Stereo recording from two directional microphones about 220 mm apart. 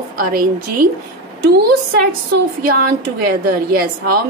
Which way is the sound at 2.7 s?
45° right (ahead or behind).